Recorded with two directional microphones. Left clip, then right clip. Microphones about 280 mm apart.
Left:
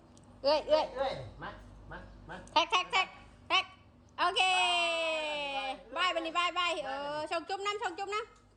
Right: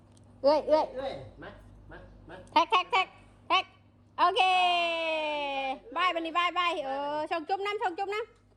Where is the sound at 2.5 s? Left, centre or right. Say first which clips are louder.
Right 4 dB; right.